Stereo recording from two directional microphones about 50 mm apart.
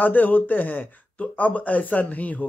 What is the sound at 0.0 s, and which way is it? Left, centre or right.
Speech, left.